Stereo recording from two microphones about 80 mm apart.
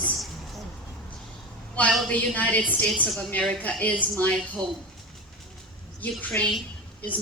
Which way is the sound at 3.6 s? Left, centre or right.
Centre.